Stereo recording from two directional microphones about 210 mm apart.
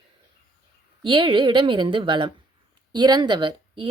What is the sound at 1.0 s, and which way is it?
Speech, 25° right (ahead or behind).